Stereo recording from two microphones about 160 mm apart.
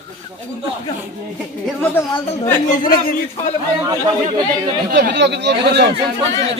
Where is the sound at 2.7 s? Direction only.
60° left (ahead or behind).